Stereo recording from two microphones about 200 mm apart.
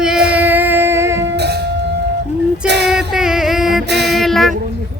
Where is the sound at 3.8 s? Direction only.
55° right (ahead or behind).